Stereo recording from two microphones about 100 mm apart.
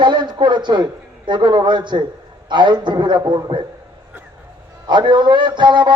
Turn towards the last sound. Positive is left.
turn(degrees=-50)  # may be behind; listen again after turning